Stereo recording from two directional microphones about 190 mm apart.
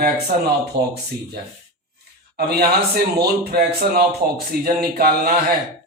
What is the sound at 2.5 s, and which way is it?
A man's voice, 55° right (ahead or behind).